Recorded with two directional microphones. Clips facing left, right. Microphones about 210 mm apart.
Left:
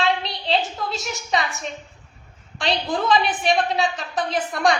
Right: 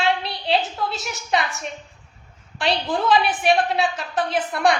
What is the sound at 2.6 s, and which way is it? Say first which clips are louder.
A woman's voice: right 1 dB; 5° right (ahead or behind).